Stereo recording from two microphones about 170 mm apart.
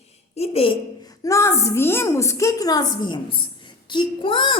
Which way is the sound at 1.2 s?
15° left (ahead or behind).